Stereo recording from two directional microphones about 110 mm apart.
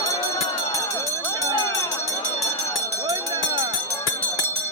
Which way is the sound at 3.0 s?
30° right (ahead or behind).